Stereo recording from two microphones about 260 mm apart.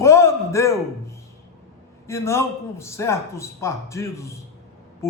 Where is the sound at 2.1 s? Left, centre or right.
Centre.